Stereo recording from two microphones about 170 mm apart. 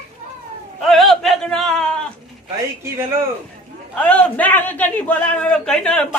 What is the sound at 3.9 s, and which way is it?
A man's voice, 10° left (ahead or behind).